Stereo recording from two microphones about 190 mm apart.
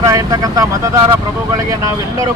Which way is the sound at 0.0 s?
15° right (ahead or behind).